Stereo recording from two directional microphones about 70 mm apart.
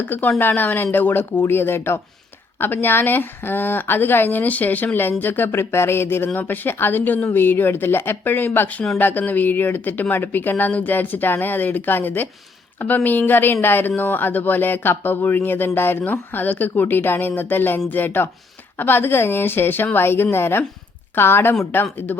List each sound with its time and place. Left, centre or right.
0.0 s a woman's voice: left